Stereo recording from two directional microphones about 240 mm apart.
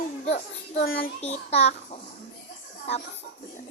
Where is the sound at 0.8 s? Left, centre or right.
Left.